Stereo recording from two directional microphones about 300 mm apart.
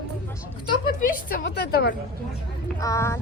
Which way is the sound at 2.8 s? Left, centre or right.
Centre.